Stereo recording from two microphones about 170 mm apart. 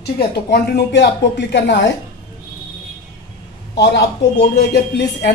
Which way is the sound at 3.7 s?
90° left.